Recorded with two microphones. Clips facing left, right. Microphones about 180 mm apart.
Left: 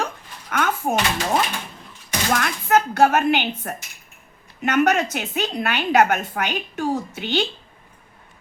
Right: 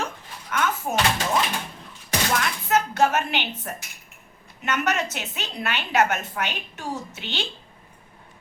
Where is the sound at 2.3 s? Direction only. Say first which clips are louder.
Left 5 dB; 50° left (ahead or behind).